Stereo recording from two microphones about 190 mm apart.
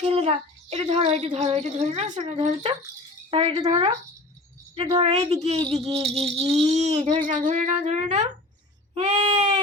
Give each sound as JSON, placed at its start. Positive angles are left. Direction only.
{"t": 0.0, "sound": "speech", "side_deg": -30}
{"t": 7.3, "sound": "speech", "side_deg": -40}